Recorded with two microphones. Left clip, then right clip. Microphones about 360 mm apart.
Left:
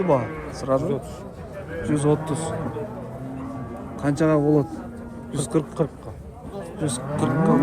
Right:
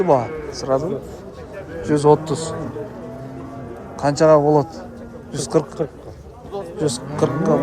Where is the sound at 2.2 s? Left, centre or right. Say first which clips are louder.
Right 3 dB; right.